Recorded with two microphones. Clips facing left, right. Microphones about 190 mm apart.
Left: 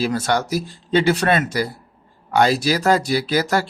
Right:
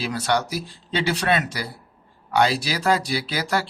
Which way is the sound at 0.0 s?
45° left (ahead or behind).